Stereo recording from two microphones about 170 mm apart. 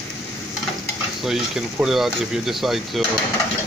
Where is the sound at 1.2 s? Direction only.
Centre (ahead or behind).